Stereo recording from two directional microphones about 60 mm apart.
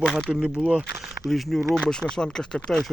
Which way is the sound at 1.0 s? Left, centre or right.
Centre.